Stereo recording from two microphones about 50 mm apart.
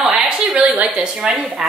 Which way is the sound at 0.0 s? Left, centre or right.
Centre.